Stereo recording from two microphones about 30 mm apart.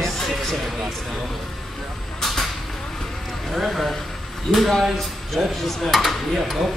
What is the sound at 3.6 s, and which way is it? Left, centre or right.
Speech, centre.